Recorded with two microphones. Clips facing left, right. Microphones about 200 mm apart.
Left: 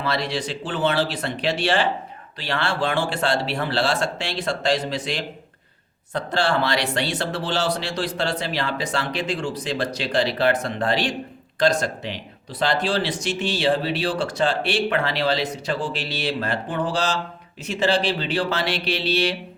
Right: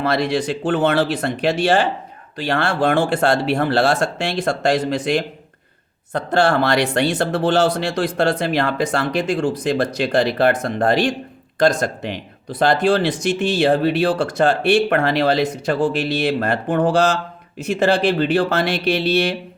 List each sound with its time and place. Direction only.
0.0 s speech: 50° right (ahead or behind)